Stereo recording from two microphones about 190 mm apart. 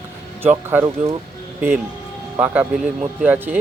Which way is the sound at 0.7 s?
10° right (ahead or behind).